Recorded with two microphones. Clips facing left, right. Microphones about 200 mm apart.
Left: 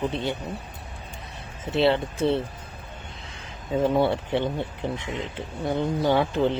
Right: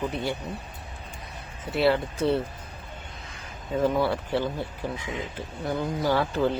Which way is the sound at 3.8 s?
25° left (ahead or behind).